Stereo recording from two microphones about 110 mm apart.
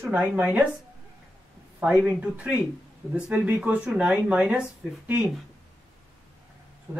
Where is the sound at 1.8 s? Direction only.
10° right (ahead or behind).